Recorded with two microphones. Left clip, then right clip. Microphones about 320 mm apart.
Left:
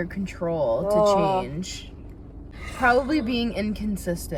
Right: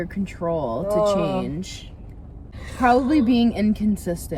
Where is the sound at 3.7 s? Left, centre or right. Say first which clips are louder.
Right 4 dB; centre.